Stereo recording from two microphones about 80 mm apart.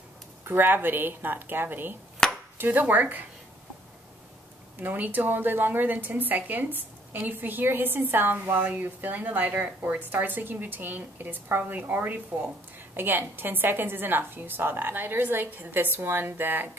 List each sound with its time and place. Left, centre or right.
0.5 s a woman's voice: right
2.2 s chopping: centre
2.6 s a woman's voice: right
4.7 s a woman's voice: right